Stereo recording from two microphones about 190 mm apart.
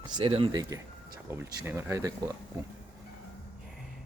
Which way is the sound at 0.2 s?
30° right (ahead or behind).